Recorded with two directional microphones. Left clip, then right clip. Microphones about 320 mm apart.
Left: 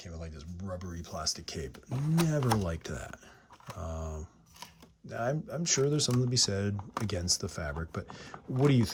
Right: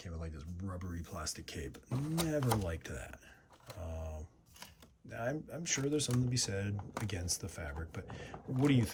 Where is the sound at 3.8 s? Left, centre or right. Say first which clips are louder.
Left 6 dB; left.